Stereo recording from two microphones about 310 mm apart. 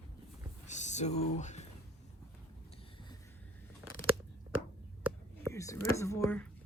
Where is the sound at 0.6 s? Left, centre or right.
Left.